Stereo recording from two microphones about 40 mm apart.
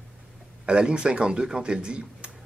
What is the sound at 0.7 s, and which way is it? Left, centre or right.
Speech, right.